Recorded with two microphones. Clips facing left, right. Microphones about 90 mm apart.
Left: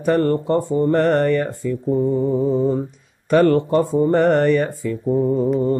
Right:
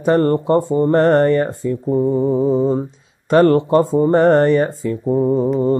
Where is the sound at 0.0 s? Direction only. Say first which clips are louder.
Right 3 dB; 25° right (ahead or behind).